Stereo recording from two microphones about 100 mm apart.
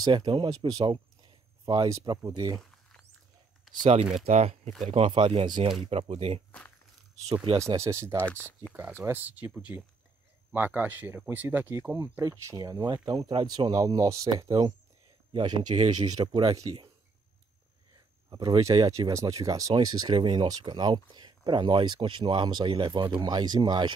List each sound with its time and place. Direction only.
0.0 s speech: 50° right (ahead or behind)
2.5 s rodents: 5° left (ahead or behind)
3.7 s typing: centre (ahead or behind)
4.2 s speech: 90° right
4.9 s speech: 65° right (ahead or behind)
5.9 s speech: 80° right
7.6 s speech: 30° right (ahead or behind)
8.2 s speech: 15° left (ahead or behind)
9.0 s speech: 20° right (ahead or behind); by 13.2 s 45° right (ahead or behind)
13.2 s speech: 65° right (ahead or behind)
13.5 s speech: 40° right (ahead or behind)
14.3 s speech: 45° right (ahead or behind)
18.6 s speech: 30° right (ahead or behind); by 23.9 s 45° right (ahead or behind)